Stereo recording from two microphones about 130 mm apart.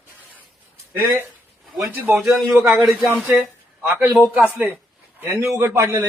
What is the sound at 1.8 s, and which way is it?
Speech, 15° right (ahead or behind).